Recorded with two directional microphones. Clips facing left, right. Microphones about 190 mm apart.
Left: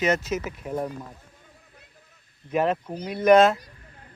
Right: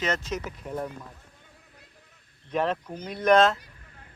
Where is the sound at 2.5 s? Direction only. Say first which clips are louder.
Left 3 dB; 5° left (ahead or behind).